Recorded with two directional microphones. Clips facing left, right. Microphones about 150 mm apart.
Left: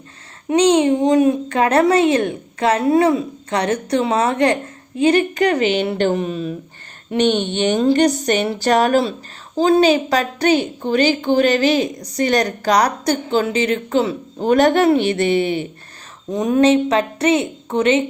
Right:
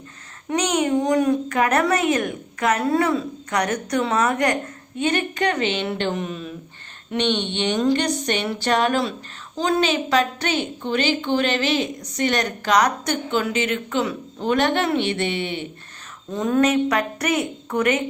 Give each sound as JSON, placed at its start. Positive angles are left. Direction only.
{"t": 0.4, "sound": "a child's voice", "side_deg": 25}
{"t": 16.3, "sound": "a child's voice", "side_deg": 20}